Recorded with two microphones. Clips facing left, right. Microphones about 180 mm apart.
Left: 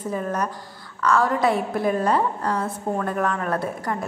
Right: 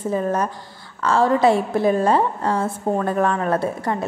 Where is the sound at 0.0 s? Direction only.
30° right (ahead or behind).